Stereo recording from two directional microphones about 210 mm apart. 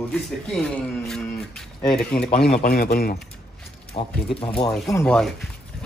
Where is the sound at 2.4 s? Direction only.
40° left (ahead or behind).